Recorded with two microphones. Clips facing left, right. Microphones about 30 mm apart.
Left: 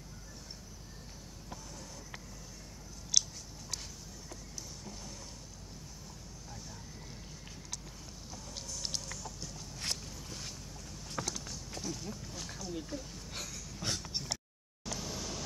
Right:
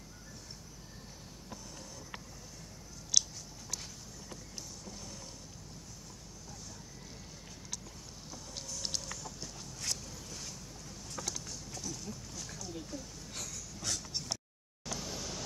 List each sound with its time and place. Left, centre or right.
3.1 s scissors: centre
8.3 s chicken: centre
10.2 s vehicle: left
11.1 s a sound: left
12.6 s oink: centre
14.9 s a sound: centre